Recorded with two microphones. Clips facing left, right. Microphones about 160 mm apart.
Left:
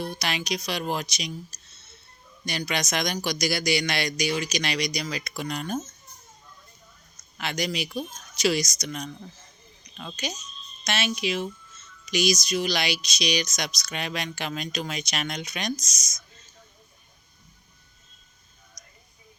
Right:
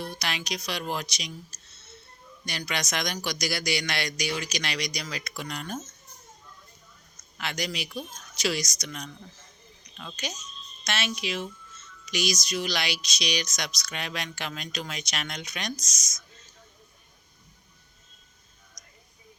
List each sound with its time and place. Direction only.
0.0 s speech: 15° left (ahead or behind)
2.5 s speech: 15° left (ahead or behind)
7.3 s speech: 20° left (ahead or behind)
10.8 s speech: 15° left (ahead or behind)
15.8 s speech: 35° right (ahead or behind)